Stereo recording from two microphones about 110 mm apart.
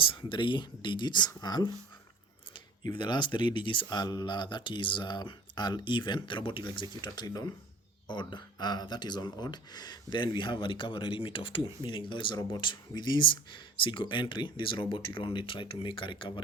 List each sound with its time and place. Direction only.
0.0 s speech: 50° left (ahead or behind)
2.9 s speech: 45° left (ahead or behind)